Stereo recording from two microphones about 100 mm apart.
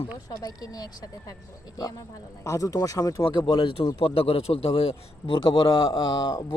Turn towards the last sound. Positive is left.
turn(degrees=45)  # may be behind; listen again after turning